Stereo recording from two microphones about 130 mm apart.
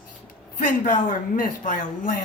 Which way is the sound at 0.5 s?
80° left.